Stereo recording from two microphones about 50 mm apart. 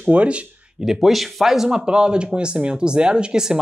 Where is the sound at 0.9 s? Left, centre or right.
Centre.